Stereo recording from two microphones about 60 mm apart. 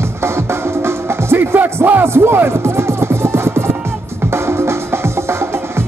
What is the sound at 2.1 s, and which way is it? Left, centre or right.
Music, right.